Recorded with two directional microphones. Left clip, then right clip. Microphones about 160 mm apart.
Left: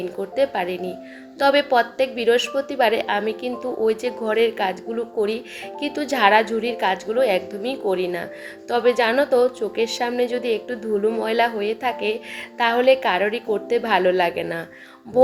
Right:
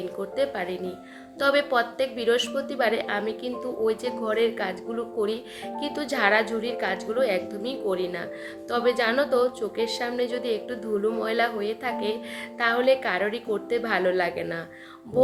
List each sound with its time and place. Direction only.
0.3 s a woman's voice: 20° left (ahead or behind)